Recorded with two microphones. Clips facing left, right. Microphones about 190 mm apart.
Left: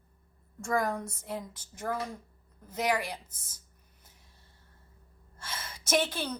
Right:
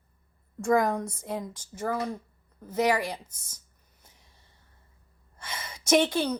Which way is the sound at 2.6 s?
10° right (ahead or behind).